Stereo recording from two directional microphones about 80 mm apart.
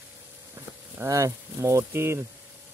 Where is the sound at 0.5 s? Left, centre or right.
Right.